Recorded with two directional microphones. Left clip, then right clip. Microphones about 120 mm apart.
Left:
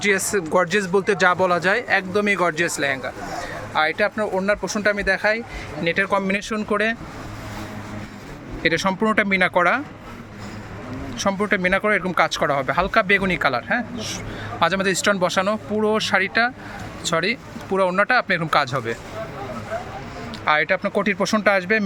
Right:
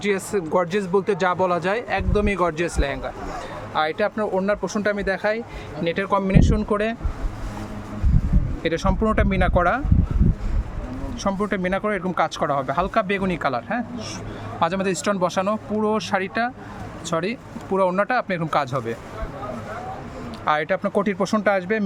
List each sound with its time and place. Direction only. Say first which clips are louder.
0.0 s speech: left 3 dB; 5° right (ahead or behind)
8.6 s speech: left 3 dB; 10° right (ahead or behind)
11.2 s speech: left 4 dB; 10° right (ahead or behind)
20.4 s speech: left 2 dB; 20° right (ahead or behind)